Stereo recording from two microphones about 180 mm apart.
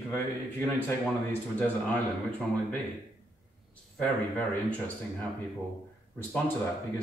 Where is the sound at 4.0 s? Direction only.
10° left (ahead or behind).